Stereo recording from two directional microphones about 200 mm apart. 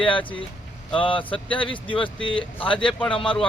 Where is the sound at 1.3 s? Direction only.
5° left (ahead or behind).